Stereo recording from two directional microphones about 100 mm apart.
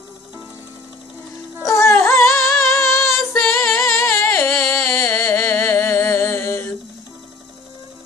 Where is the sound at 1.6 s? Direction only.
30° left (ahead or behind).